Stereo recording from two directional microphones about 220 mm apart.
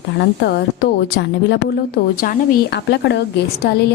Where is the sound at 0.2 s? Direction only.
50° left (ahead or behind).